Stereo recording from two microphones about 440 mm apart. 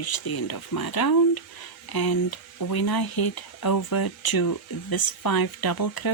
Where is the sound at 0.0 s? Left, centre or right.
Left.